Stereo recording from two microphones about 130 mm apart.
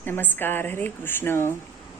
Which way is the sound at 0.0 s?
15° left (ahead or behind).